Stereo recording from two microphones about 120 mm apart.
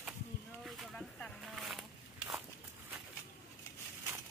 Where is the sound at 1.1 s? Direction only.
10° left (ahead or behind).